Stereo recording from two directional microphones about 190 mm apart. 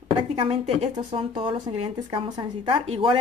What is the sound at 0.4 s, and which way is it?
A woman's voice, 25° right (ahead or behind).